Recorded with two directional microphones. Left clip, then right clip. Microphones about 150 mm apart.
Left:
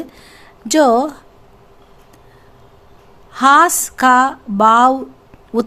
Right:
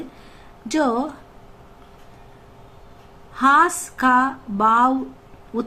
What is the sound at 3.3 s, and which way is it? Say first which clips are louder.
A woman's voice: left 5 dB; 80° left.